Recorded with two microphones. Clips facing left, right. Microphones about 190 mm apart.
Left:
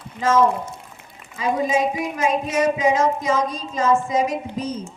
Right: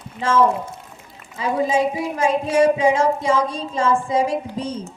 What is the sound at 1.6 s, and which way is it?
Speech, 30° right (ahead or behind).